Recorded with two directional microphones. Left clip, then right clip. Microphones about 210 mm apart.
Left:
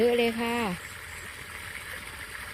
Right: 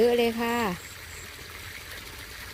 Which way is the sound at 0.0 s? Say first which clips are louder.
Right 2 dB; 20° right (ahead or behind).